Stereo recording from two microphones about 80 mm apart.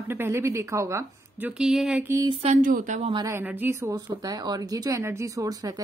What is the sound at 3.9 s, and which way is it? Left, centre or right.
Speech, right.